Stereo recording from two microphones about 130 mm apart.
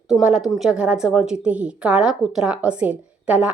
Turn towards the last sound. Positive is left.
turn(degrees=-10)  # may be behind; listen again after turning